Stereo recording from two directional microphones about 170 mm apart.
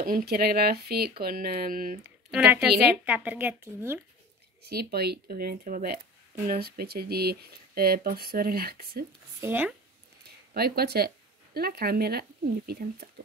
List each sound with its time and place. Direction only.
0.0 s speech: 60° right (ahead or behind)
2.3 s a woman's voice: 5° right (ahead or behind)
4.6 s speech: 70° right (ahead or behind)
9.4 s a woman's voice: 10° right (ahead or behind)
10.5 s speech: 65° right (ahead or behind)